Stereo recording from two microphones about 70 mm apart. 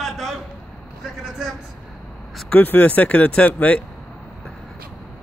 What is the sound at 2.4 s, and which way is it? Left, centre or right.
Speech, left.